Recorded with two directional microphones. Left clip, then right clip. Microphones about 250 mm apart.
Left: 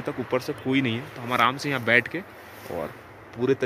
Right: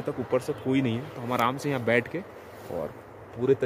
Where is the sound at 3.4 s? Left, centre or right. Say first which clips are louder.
Even; left.